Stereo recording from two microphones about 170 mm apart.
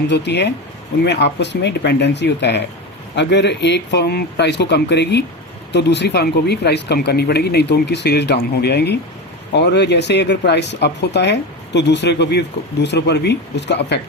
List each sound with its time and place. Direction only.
0.1 s speech: 90° left
9.5 s speech: 85° left